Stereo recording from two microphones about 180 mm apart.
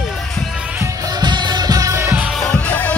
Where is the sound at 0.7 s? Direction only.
20° right (ahead or behind).